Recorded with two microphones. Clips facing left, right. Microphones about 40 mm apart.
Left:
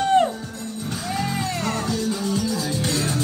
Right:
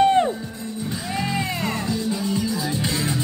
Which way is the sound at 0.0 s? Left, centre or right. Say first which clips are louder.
Right 1 dB; right.